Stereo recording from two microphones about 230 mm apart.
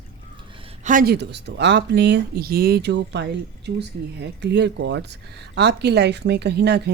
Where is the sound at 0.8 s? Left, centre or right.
Right.